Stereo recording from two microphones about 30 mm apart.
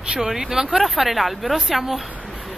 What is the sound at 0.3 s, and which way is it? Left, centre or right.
Speech, centre.